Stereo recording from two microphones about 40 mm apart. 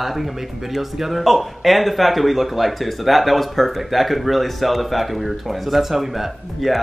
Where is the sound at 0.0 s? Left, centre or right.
Centre.